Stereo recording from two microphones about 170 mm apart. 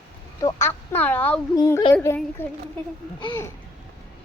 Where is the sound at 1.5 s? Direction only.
20° left (ahead or behind).